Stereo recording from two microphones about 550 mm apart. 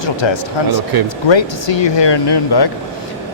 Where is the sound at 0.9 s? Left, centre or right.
Right.